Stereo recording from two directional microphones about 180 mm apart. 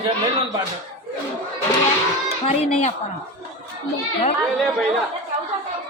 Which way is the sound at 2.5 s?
40° left (ahead or behind).